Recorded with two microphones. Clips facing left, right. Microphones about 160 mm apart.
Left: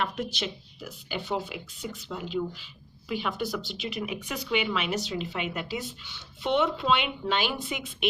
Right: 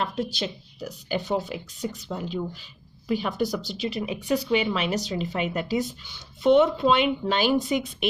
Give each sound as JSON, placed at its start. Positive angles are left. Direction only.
{"t": 0.0, "sound": "speech", "side_deg": -35}